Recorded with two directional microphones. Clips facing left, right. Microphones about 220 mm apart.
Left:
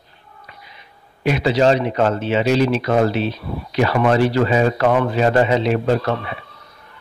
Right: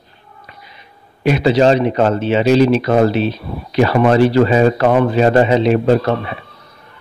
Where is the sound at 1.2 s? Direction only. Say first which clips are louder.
Right 4 dB; 30° right (ahead or behind).